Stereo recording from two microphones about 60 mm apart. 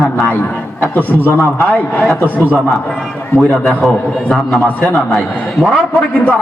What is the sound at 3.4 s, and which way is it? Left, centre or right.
Speech, centre.